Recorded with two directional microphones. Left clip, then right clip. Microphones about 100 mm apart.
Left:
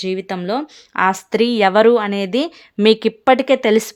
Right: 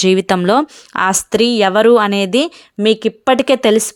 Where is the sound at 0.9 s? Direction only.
55° right (ahead or behind).